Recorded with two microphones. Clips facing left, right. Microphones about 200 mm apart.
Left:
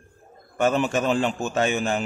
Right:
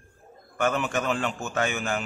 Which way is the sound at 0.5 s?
25° left (ahead or behind).